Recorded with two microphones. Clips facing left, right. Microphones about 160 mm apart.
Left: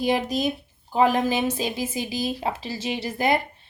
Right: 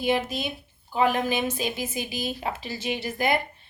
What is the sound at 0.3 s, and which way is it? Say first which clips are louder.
Speech: left 7 dB; 40° left (ahead or behind).